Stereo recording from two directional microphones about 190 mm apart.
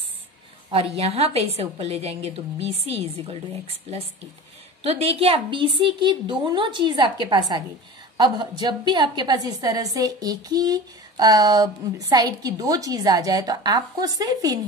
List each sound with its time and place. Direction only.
0.7 s a woman's voice: 30° right (ahead or behind)